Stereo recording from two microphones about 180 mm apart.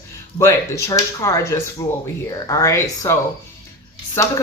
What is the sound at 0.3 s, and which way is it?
Speech, 15° left (ahead or behind).